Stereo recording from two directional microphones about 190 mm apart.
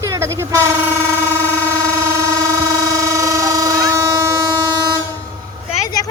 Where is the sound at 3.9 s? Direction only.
15° right (ahead or behind).